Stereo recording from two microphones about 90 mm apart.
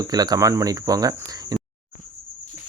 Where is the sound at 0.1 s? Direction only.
45° right (ahead or behind).